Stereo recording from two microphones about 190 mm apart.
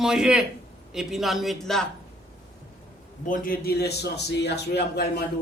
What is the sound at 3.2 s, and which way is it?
A man's voice, 45° left (ahead or behind).